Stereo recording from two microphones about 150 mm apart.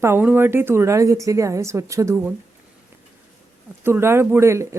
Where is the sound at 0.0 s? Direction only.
15° right (ahead or behind).